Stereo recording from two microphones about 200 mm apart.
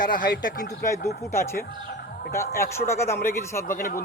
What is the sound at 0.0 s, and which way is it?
Speech, 40° left (ahead or behind).